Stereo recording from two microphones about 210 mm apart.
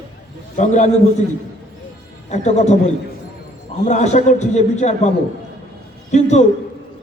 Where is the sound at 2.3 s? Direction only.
35° left (ahead or behind).